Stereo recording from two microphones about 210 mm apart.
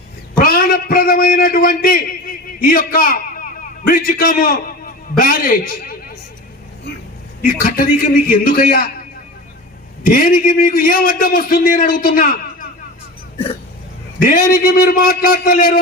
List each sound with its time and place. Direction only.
0.3 s a sound: 40° left (ahead or behind)
2.6 s a man's voice: 40° left (ahead or behind)
7.4 s a man's voice: 40° left (ahead or behind)
10.1 s a man's voice: 40° left (ahead or behind)
14.2 s a man's voice: 40° left (ahead or behind)